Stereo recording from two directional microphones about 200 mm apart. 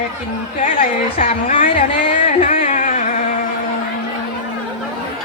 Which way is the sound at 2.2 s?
35° left (ahead or behind).